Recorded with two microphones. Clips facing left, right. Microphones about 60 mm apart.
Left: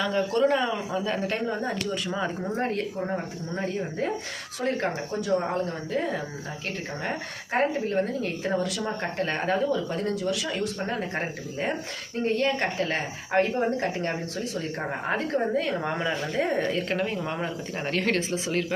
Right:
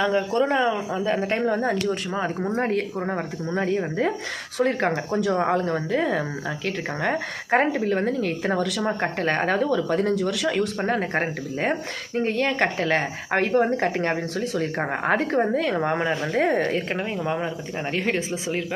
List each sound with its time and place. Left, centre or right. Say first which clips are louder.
0.0 s speech: right 2 dB; right
1.4 s speech: right 6 dB; right
2.1 s speech: right 3 dB; right
2.6 s speech: right 4 dB; right
3.0 s speech: right 3 dB; right
15.7 s speech: right 4 dB; right
16.4 s speech: right 4 dB; right
16.9 s speech: right 2 dB; centre